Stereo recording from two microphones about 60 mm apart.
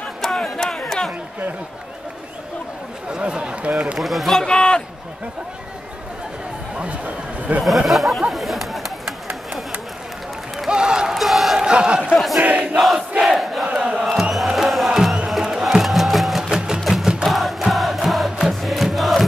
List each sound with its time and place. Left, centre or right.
0.2 s a sound: centre
3.1 s speech: centre
4.0 s a man's voice: centre
7.6 s speech: centre
8.3 s chatter: centre
10.7 s a sound: centre
11.1 s a sound: centre
11.6 s speech: centre
12.4 s crowd: right
12.7 s crowd: centre
13.7 s crowd: centre
14.3 s music: centre
16.4 s music: centre